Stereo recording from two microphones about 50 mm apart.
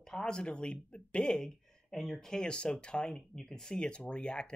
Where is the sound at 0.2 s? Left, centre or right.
Centre.